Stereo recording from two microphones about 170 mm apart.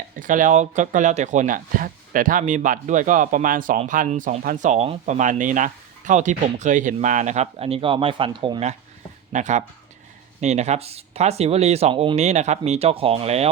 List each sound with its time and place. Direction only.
0.2 s speech: 50° right (ahead or behind); by 8.6 s 30° right (ahead or behind)
9.3 s speech: 45° right (ahead or behind)